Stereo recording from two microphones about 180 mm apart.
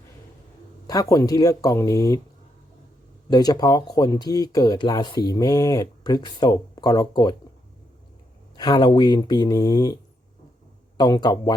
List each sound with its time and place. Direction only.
0.9 s speech: 20° left (ahead or behind)
3.2 s speech: 20° left (ahead or behind)
8.5 s speech: 25° left (ahead or behind)